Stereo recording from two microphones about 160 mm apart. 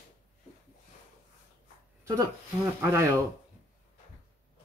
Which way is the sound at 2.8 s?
15° right (ahead or behind).